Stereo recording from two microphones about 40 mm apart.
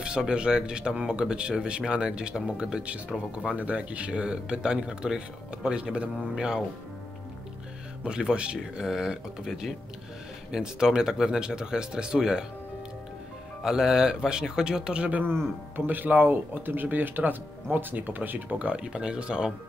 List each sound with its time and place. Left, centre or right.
0.0 s speech: right
3.5 s speech: right; by 6.6 s centre
8.0 s speech: right
13.6 s a man's voice: centre
15.7 s speech: right
18.6 s speech: right
18.9 s speech: right